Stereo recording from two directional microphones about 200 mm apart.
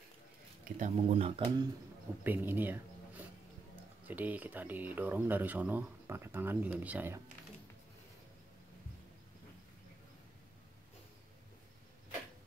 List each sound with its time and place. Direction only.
0.7 s speech: 35° right (ahead or behind)
2.2 s speech: 10° right (ahead or behind)